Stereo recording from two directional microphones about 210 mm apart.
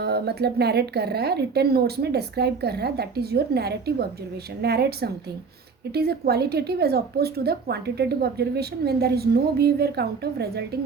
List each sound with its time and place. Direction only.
0.0 s a woman's voice: 50° right (ahead or behind)